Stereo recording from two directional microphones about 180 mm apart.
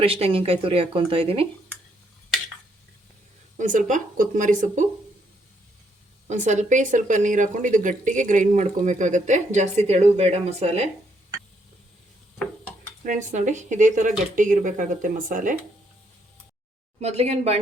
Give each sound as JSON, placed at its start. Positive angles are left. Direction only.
{"t": 0.0, "sound": "speech", "side_deg": -30}
{"t": 3.6, "sound": "speech", "side_deg": -45}
{"t": 6.2, "sound": "speech", "side_deg": -40}
{"t": 13.1, "sound": "speech", "side_deg": -45}
{"t": 17.0, "sound": "speech", "side_deg": -35}